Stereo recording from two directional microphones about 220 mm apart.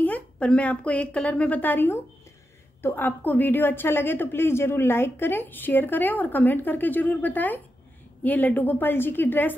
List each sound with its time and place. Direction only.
0.0 s a woman's voice: 5° left (ahead or behind)